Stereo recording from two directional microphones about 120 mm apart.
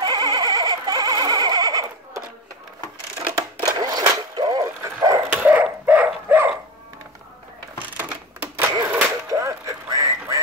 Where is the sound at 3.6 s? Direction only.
35° right (ahead or behind).